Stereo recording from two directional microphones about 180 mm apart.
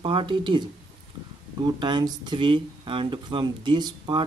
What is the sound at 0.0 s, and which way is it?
Speech, 30° right (ahead or behind).